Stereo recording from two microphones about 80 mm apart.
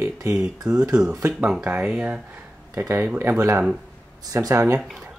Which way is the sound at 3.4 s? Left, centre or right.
Right.